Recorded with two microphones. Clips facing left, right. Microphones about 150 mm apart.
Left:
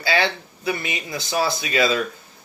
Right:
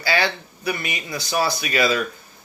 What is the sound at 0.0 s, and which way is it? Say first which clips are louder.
Speech: left 1 dB; 20° left (ahead or behind).